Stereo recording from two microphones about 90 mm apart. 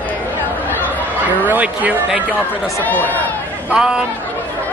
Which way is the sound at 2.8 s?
20° left (ahead or behind).